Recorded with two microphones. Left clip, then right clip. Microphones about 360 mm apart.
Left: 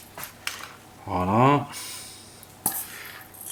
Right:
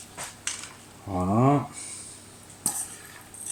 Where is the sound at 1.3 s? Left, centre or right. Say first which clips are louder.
Left 4 dB; left.